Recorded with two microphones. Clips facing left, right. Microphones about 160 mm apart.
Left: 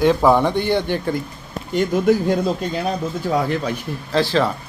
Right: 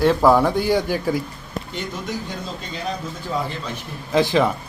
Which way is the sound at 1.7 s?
55° left (ahead or behind).